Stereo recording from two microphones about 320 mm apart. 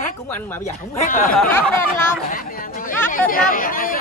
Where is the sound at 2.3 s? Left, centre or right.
Left.